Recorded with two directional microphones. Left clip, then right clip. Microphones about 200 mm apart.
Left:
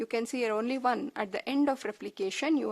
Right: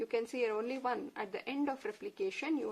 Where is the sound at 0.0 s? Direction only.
50° left (ahead or behind).